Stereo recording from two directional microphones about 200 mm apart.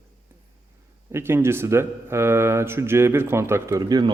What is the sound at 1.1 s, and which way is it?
Speech, 10° right (ahead or behind).